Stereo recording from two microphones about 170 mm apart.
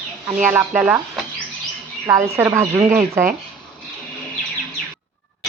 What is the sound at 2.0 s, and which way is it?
A woman's voice, 15° right (ahead or behind).